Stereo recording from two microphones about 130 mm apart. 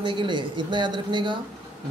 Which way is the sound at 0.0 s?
40° right (ahead or behind).